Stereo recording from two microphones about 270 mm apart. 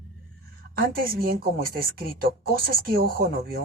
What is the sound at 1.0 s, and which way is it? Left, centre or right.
Speech, right.